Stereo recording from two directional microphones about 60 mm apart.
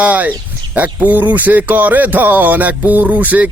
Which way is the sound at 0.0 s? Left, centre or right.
Right.